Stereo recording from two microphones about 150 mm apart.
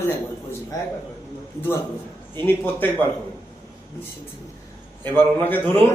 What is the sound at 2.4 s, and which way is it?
Speech, 10° left (ahead or behind).